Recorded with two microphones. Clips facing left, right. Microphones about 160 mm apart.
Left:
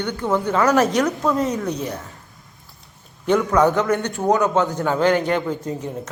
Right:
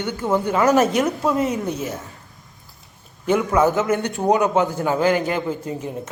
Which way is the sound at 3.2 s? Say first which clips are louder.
Left 1 dB; 10° right (ahead or behind).